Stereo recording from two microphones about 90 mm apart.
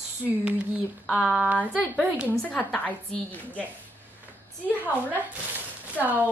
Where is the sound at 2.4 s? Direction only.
10° left (ahead or behind).